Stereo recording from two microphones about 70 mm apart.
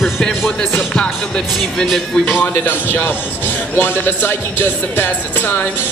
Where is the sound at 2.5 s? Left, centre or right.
Left.